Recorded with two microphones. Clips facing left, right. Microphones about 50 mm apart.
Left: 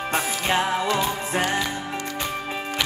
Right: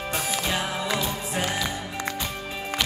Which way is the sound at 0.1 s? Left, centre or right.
Left.